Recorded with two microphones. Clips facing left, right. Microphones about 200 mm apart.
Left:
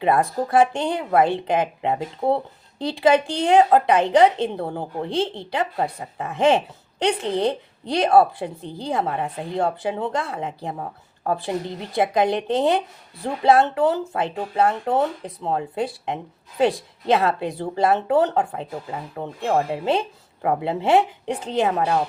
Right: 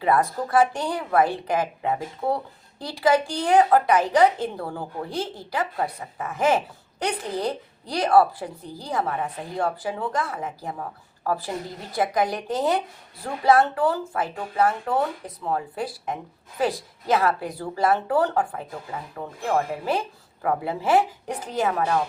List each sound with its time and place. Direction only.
0.0 s speech: 25° left (ahead or behind)